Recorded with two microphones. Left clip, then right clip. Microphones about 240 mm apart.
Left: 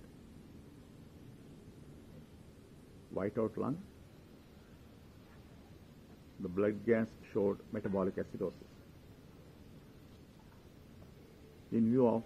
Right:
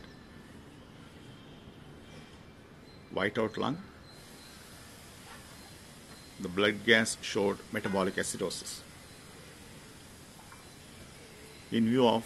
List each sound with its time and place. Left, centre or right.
3.2 s speech: centre
6.4 s speech: centre
11.7 s speech: centre